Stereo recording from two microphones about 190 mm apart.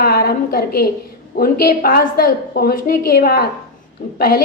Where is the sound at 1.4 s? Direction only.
50° left (ahead or behind).